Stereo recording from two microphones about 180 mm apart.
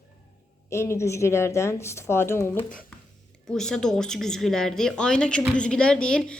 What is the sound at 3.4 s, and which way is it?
Speech, 5° left (ahead or behind).